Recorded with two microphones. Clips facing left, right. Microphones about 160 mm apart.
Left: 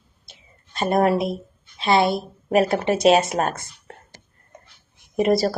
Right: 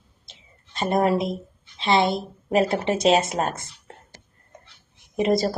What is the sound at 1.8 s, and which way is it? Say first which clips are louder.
Speech: left 2 dB; 25° right (ahead or behind).